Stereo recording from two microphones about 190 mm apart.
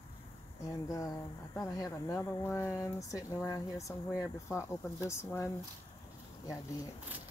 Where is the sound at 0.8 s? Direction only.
20° left (ahead or behind).